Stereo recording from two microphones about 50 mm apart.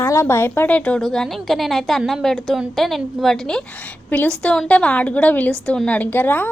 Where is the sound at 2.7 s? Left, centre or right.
Centre.